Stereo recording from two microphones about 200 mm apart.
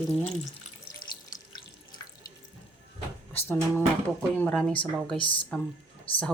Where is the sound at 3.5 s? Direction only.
10° left (ahead or behind).